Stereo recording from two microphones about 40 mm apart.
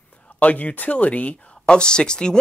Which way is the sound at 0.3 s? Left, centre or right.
Left.